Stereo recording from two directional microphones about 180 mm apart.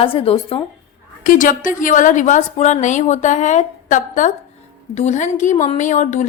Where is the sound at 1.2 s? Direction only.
50° left (ahead or behind).